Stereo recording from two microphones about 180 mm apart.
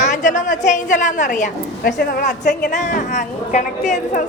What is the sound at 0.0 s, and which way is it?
A woman's voice, 45° left (ahead or behind).